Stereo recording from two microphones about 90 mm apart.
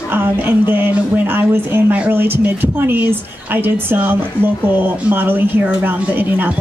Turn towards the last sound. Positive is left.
turn(degrees=-20)  # may be behind; listen again after turning